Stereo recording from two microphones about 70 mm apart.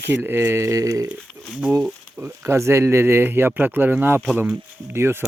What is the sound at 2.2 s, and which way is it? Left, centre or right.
Speech, right.